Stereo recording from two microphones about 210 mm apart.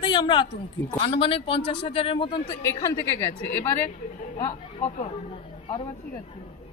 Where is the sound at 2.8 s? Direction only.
10° left (ahead or behind).